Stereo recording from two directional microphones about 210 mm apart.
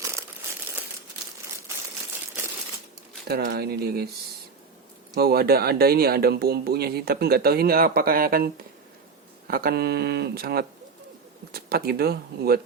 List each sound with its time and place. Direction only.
3.2 s speech: 50° right (ahead or behind)
5.1 s speech: 50° right (ahead or behind)
9.5 s speech: 45° right (ahead or behind)